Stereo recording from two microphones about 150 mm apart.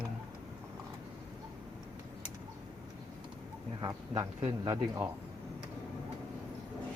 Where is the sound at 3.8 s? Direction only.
25° right (ahead or behind).